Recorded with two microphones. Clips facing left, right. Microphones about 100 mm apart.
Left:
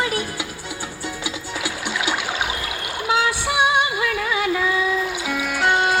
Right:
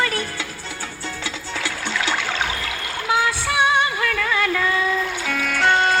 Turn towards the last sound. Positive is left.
turn(degrees=10)  # may be behind; listen again after turning